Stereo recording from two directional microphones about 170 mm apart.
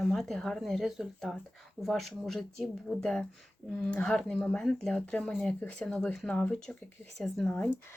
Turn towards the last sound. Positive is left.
turn(degrees=5)  # may be behind; listen again after turning